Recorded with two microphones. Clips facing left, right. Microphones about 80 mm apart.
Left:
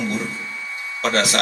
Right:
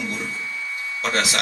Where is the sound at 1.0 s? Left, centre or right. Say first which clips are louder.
Left 3 dB; left.